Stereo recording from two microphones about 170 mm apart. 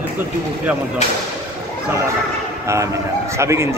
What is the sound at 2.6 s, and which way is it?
A man's voice, 15° right (ahead or behind).